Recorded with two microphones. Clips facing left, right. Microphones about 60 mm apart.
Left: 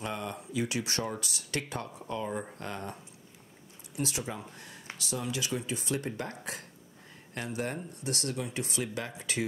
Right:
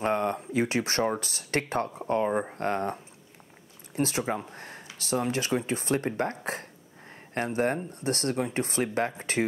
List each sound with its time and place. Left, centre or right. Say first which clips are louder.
0.0 s speech: right 10 dB; right